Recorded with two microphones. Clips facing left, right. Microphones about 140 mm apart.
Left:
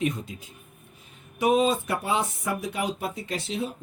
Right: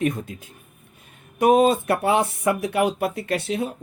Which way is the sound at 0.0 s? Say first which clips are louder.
Right 4 dB; 50° right (ahead or behind).